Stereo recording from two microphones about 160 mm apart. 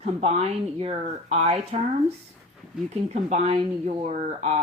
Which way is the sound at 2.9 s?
40° right (ahead or behind).